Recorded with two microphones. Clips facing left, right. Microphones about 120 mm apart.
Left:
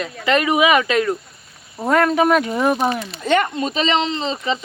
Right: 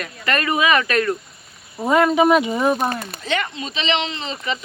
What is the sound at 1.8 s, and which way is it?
Speech, 5° right (ahead or behind).